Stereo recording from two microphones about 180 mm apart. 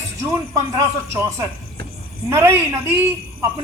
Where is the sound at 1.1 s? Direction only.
15° right (ahead or behind).